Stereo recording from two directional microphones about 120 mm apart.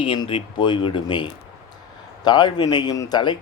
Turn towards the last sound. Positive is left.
turn(degrees=35)  # may be behind; listen again after turning